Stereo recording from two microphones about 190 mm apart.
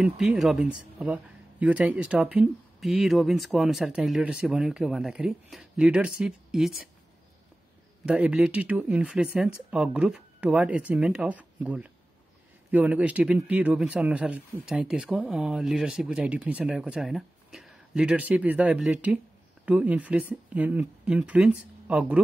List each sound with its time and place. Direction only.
0.0 s speech: 5° right (ahead or behind)
8.0 s speech: 5° right (ahead or behind)